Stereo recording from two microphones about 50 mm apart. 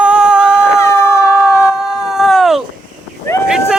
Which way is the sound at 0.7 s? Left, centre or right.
Left.